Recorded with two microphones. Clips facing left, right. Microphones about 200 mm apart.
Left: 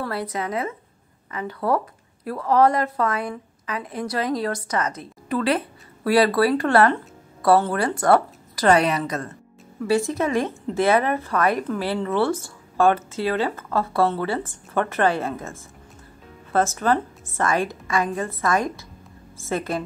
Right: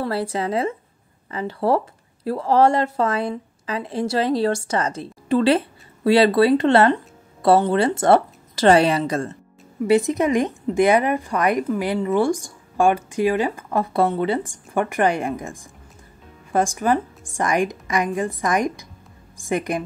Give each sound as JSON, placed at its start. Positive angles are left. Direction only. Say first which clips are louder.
{"t": 0.0, "sound": "a woman's voice", "louder": "right 4 dB", "side_deg": -30}
{"t": 9.8, "sound": "a woman's voice", "louder": "right 4 dB", "side_deg": -20}